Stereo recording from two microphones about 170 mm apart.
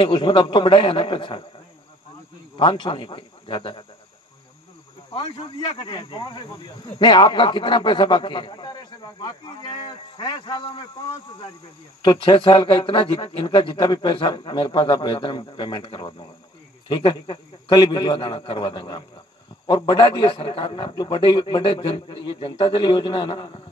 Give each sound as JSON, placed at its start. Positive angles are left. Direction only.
{"t": 0.0, "sound": "a man's voice", "side_deg": 30}
{"t": 2.5, "sound": "a man's voice", "side_deg": 30}
{"t": 5.1, "sound": "a man's voice", "side_deg": 30}